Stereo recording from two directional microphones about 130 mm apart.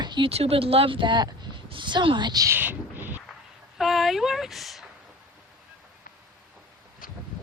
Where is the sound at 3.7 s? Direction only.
Centre (ahead or behind).